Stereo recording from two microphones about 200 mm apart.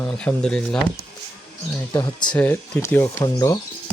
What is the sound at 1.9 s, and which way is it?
Speech, 20° left (ahead or behind).